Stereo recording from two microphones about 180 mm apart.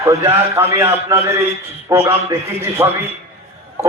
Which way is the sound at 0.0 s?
15° right (ahead or behind).